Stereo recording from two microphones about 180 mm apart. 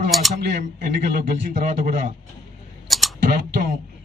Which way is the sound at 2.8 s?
Centre (ahead or behind).